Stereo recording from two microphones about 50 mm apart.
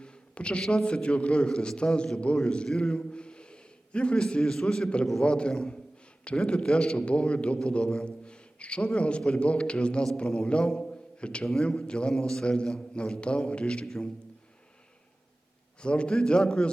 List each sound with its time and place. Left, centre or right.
0.0 s a sound: left
0.6 s a man's voice: centre
0.9 s a man's voice: left
10.7 s a sound: centre
11.6 s a man's voice: centre
15.8 s a man's voice: left